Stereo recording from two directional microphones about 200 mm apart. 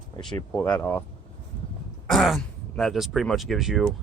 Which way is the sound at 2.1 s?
Centre (ahead or behind).